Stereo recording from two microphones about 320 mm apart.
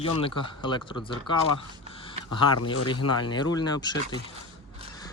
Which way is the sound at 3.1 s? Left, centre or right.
Centre.